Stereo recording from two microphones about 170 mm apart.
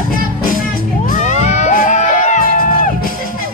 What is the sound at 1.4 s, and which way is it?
Music, 45° left (ahead or behind).